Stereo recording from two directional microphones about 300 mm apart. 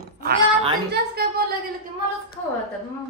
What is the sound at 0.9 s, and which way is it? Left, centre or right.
Speech, right.